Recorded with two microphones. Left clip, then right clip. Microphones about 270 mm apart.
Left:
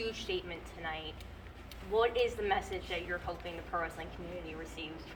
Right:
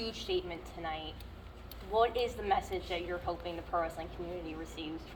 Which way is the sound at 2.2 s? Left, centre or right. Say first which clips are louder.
Even; right.